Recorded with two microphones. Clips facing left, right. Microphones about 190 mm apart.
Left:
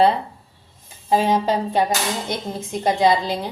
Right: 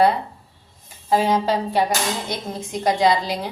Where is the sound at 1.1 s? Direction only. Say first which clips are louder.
Even; 20° left (ahead or behind).